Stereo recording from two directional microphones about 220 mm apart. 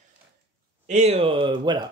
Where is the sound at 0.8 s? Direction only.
30° right (ahead or behind).